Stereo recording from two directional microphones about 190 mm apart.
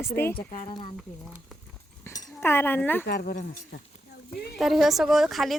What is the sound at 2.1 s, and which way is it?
Speech, 10° left (ahead or behind).